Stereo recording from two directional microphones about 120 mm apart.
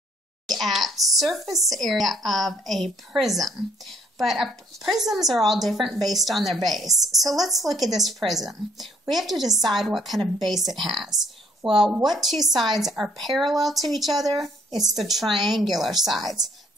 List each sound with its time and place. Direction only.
0.5 s speech: centre (ahead or behind)